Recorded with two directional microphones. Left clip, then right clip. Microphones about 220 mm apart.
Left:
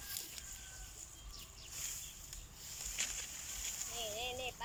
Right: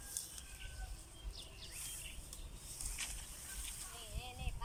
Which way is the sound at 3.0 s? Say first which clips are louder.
Left 5 dB; 35° left (ahead or behind).